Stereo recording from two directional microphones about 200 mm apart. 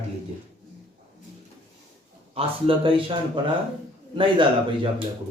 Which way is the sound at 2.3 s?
25° right (ahead or behind).